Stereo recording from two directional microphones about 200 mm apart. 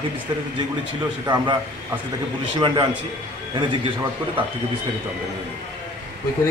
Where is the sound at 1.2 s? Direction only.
20° right (ahead or behind).